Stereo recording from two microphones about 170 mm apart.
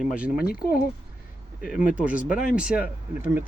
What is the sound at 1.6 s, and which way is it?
Speech, 5° right (ahead or behind).